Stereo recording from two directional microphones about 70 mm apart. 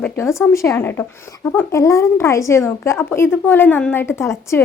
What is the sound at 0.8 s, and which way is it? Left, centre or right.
Speech, left.